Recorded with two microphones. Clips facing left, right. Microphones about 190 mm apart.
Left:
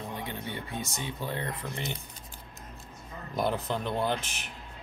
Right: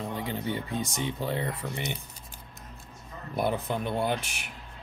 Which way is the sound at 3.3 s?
5° right (ahead or behind).